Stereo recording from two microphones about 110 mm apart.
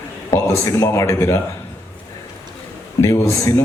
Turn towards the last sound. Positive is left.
turn(degrees=30)  # may be behind; listen again after turning